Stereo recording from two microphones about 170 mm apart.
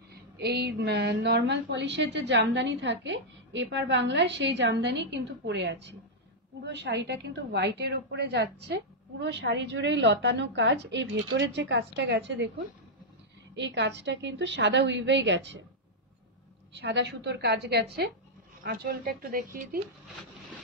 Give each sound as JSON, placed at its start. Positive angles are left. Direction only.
{"t": 0.4, "sound": "a woman's voice", "side_deg": -75}
{"t": 13.6, "sound": "a woman's voice", "side_deg": -90}
{"t": 16.8, "sound": "a woman's voice", "side_deg": -90}
{"t": 18.6, "sound": "a woman's voice", "side_deg": -60}